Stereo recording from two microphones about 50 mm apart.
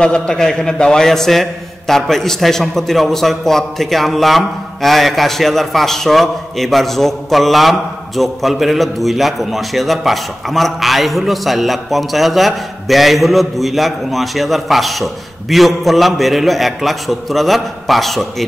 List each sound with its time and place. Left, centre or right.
0.0 s a man's voice: centre